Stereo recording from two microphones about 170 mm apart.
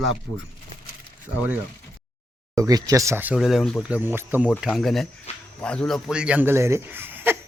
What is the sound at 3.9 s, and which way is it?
A man's voice, 10° right (ahead or behind).